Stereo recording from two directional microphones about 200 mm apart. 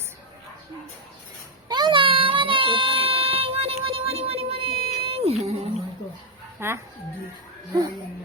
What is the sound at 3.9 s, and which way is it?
Music, 30° right (ahead or behind).